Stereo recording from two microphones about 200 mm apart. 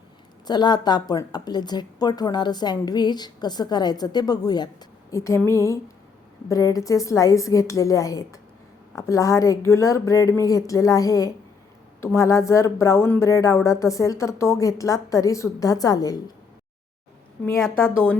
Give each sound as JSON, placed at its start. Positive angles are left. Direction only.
{"t": 0.4, "sound": "a woman's voice", "side_deg": 20}
{"t": 17.7, "sound": "speech", "side_deg": 10}